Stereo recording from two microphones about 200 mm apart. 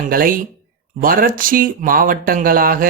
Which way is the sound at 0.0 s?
45° right (ahead or behind).